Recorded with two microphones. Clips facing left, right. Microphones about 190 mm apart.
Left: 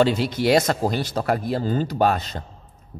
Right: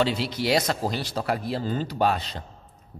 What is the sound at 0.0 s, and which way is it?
A man's voice, 45° left (ahead or behind).